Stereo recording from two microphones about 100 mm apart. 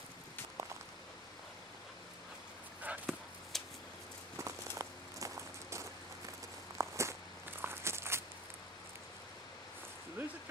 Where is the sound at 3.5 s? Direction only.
5° left (ahead or behind).